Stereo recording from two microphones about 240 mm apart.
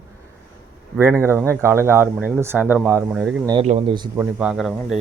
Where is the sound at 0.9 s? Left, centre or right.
Centre.